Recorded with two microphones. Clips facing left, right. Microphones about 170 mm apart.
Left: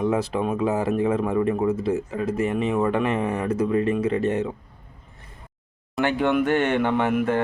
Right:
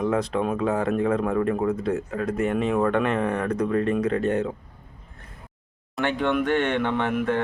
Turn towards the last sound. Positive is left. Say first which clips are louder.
# left 2 dB
turn(degrees=5)  # may be behind; listen again after turning